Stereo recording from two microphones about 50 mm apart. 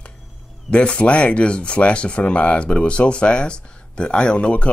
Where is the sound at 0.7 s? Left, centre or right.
Left.